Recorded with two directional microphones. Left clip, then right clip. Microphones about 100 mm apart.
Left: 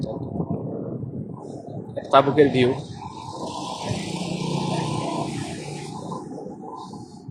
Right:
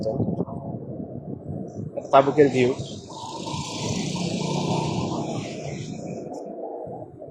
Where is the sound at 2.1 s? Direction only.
35° left (ahead or behind).